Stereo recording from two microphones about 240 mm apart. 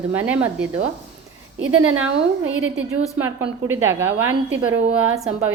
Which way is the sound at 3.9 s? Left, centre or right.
Centre.